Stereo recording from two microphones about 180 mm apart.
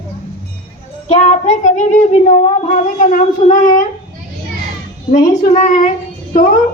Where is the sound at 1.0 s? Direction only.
40° left (ahead or behind).